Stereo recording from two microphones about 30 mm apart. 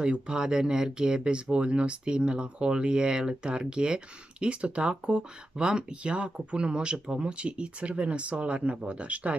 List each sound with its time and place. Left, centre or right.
0.0 s speech: right